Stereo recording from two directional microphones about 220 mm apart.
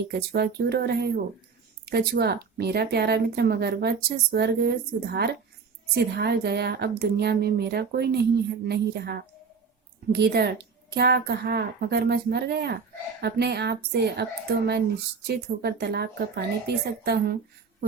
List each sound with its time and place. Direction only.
0.1 s speech: 45° right (ahead or behind)